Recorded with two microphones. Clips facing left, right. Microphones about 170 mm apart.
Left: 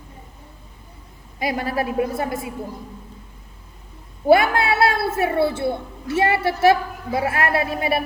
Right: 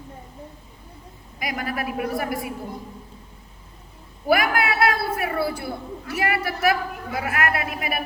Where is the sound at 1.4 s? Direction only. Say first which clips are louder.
Left 5 dB; 30° left (ahead or behind).